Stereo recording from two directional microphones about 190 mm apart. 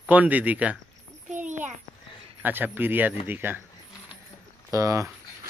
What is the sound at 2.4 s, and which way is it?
Speech, 10° right (ahead or behind).